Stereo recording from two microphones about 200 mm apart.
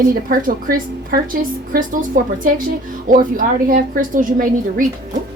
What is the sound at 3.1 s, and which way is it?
A woman's voice, 45° right (ahead or behind).